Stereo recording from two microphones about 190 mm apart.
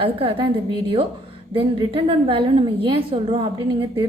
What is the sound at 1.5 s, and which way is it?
A woman's voice, 30° right (ahead or behind).